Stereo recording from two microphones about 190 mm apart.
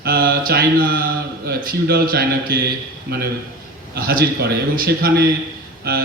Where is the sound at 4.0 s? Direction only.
50° right (ahead or behind).